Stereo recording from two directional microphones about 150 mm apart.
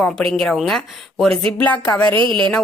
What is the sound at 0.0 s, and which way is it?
A woman's voice, 5° left (ahead or behind).